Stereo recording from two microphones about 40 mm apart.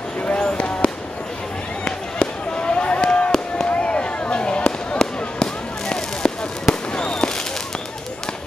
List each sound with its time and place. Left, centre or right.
0.4 s fireworks: left